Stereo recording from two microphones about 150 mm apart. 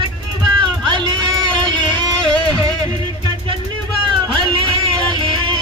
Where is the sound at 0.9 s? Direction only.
30° right (ahead or behind).